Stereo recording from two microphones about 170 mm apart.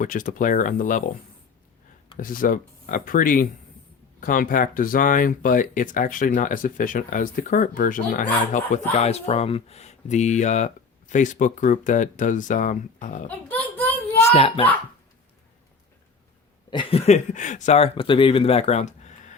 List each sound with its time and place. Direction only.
0.0 s speech: 50° left (ahead or behind)
2.1 s speech: 55° left (ahead or behind)
8.9 s speech: 40° left (ahead or behind)
13.5 s a sound: 10° left (ahead or behind)
14.3 s speech: 35° left (ahead or behind)
16.6 s a sound: 30° left (ahead or behind)
17.1 s speech: 45° left (ahead or behind)